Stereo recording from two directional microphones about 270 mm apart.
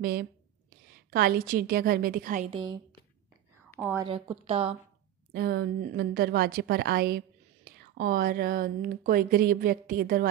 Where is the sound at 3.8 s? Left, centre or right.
Centre.